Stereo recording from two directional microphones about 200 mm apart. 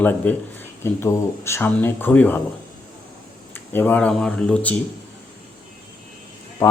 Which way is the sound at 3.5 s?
10° left (ahead or behind).